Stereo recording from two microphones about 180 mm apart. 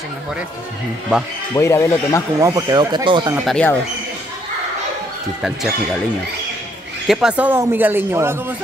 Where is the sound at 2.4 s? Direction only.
20° right (ahead or behind).